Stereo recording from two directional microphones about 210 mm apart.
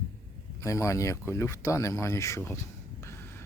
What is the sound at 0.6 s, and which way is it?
Speech, 15° left (ahead or behind).